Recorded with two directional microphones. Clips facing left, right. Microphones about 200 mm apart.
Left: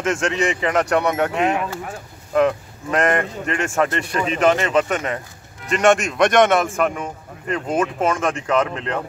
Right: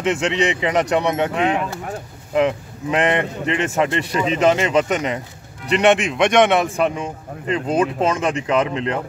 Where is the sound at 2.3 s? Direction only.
15° right (ahead or behind).